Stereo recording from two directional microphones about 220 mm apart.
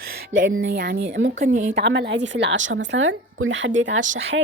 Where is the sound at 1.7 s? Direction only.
50° right (ahead or behind).